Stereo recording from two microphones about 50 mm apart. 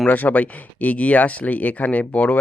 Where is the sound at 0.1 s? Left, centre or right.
Left.